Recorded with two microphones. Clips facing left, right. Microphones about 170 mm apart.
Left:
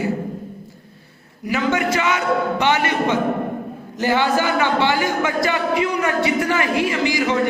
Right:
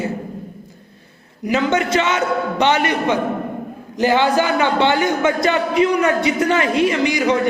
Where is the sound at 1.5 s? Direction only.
20° right (ahead or behind).